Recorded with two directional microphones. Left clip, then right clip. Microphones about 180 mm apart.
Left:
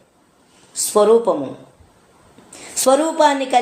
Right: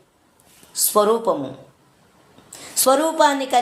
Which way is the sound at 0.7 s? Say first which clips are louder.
Left 4 dB; 30° right (ahead or behind).